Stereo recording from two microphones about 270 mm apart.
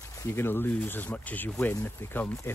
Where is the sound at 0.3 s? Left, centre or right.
Centre.